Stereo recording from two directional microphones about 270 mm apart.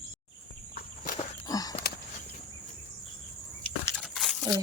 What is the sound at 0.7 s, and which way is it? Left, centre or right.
Walk, left.